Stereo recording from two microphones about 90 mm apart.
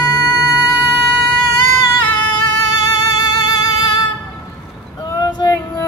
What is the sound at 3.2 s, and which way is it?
Music, 50° left (ahead or behind).